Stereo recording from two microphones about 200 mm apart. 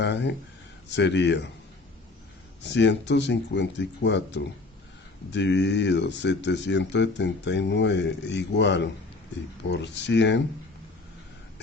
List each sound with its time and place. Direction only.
0.0 s speech: 60° left (ahead or behind)
2.6 s speech: 60° left (ahead or behind)